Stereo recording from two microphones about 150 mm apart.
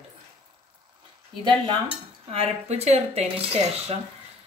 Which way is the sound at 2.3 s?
45° right (ahead or behind).